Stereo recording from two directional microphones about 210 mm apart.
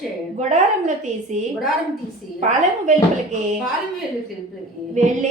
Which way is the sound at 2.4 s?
35° right (ahead or behind).